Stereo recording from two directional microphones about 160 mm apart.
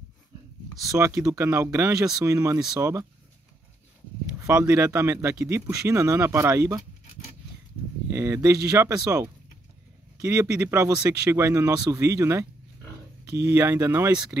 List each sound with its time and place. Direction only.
0.8 s speech: 20° right (ahead or behind)
4.5 s speech: 15° right (ahead or behind)
8.1 s speech: 15° right (ahead or behind)